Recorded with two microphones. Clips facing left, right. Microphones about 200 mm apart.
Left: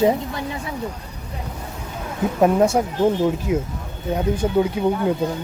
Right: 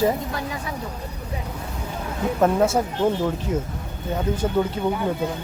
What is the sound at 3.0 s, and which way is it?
Speech, 10° left (ahead or behind).